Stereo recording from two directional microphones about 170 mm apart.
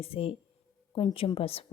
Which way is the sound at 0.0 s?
35° left (ahead or behind).